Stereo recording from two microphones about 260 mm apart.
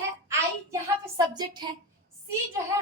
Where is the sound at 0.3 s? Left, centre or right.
Centre.